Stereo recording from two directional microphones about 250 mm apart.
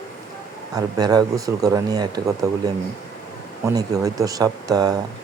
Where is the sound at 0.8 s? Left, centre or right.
Centre.